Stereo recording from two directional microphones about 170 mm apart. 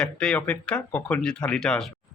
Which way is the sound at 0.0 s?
5° left (ahead or behind).